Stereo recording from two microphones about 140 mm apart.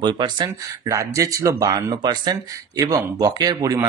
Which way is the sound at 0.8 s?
20° right (ahead or behind).